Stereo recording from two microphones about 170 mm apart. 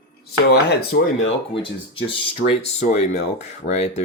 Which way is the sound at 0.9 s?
75° left (ahead or behind).